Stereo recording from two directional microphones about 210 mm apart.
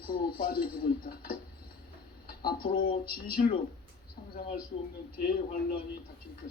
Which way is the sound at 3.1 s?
45° left (ahead or behind).